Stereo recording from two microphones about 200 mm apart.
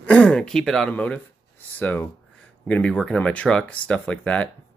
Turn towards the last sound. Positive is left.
turn(degrees=5)  # may be behind; listen again after turning